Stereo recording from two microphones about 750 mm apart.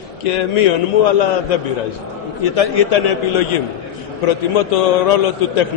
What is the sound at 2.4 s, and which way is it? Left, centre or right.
A man's voice, left.